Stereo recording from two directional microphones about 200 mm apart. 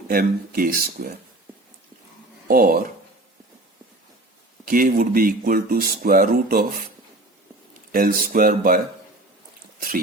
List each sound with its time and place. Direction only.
0.1 s speech: 45° right (ahead or behind)
2.5 s speech: 45° right (ahead or behind)
4.6 s speech: 45° right (ahead or behind)
7.9 s speech: 45° right (ahead or behind)